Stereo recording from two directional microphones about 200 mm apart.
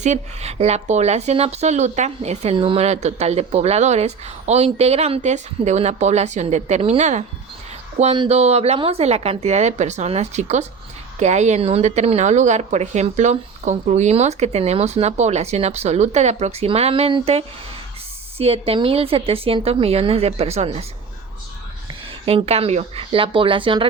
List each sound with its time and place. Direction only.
0.0 s a woman's voice: 35° right (ahead or behind)
22.3 s a woman's voice: 30° right (ahead or behind)